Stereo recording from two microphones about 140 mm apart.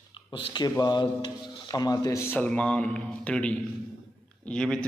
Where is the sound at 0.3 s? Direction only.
35° left (ahead or behind).